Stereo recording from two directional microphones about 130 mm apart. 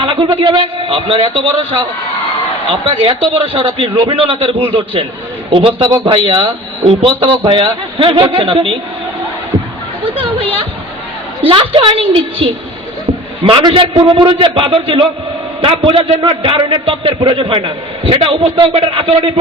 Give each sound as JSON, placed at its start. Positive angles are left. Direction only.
{"t": 0.0, "sound": "a man's voice", "side_deg": -40}
{"t": 10.2, "sound": "a sound", "side_deg": -45}
{"t": 11.4, "sound": "a man's voice", "side_deg": -40}
{"t": 13.1, "sound": "a man's voice", "side_deg": -40}